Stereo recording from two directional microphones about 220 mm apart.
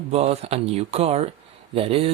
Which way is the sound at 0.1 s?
30° right (ahead or behind).